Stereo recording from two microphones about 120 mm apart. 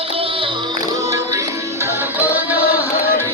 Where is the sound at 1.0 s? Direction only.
25° right (ahead or behind).